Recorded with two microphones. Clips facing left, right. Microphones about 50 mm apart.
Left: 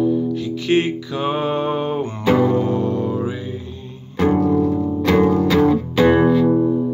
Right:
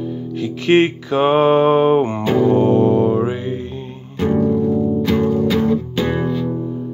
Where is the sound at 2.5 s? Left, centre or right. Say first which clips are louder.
Right 6 dB; right.